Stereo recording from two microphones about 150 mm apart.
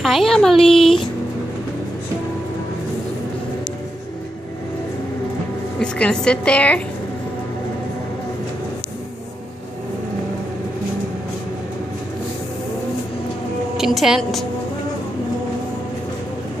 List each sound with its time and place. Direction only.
0.0 s speech: centre (ahead or behind)
5.8 s a woman's voice: 5° left (ahead or behind)
13.7 s a woman's voice: 5° right (ahead or behind)